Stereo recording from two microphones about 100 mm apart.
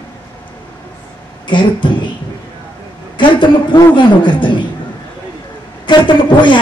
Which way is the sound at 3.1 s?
55° left (ahead or behind).